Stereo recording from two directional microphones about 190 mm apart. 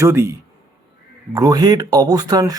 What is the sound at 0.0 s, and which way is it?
Speech, 15° right (ahead or behind).